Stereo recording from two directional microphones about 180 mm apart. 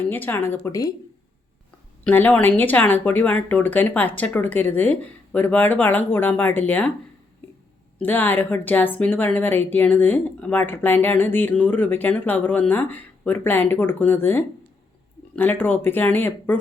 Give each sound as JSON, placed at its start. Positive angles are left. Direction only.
{"t": 0.0, "sound": "speech", "side_deg": 10}
{"t": 2.0, "sound": "speech", "side_deg": 10}
{"t": 7.9, "sound": "speech", "side_deg": 10}